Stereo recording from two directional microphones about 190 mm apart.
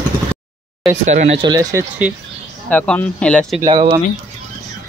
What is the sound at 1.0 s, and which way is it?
Speech, 40° right (ahead or behind).